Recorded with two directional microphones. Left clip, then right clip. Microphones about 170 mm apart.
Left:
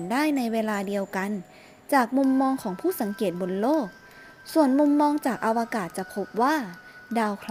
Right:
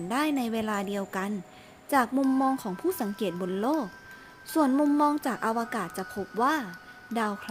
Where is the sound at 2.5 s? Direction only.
15° left (ahead or behind).